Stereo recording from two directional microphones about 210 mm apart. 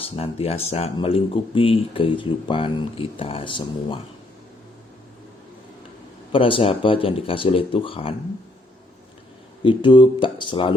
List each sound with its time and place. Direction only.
0.0 s speech: 30° left (ahead or behind)
6.3 s speech: 25° left (ahead or behind)
9.6 s speech: 20° left (ahead or behind)